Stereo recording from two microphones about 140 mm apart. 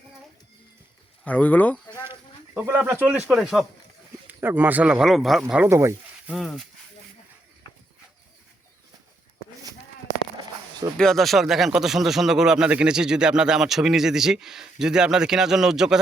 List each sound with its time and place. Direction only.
1.2 s speech: 10° left (ahead or behind)
2.6 s speech: 15° right (ahead or behind)
4.3 s speech: 15° right (ahead or behind)
5.6 s speech: 20° right (ahead or behind)
6.3 s speech: centre (ahead or behind)
10.9 s speech: 5° left (ahead or behind)